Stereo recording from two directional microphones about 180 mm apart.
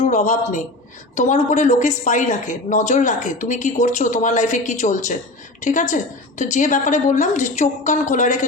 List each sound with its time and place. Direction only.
0.0 s a man's voice: 45° left (ahead or behind)